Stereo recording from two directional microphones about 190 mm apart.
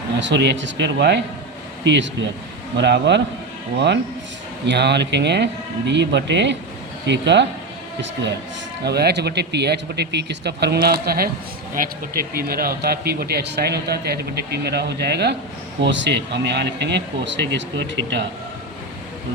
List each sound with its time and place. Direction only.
0.2 s speech: 65° right (ahead or behind)
4.6 s speech: 65° right (ahead or behind)
8.8 s speech: 60° right (ahead or behind)